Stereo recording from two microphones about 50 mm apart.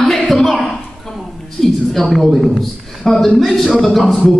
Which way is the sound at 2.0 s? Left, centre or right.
Centre.